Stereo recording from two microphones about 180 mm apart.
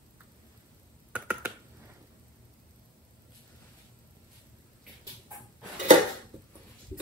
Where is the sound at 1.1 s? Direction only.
10° right (ahead or behind).